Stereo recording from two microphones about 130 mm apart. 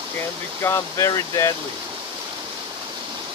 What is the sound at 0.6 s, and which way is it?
Speech, 20° left (ahead or behind).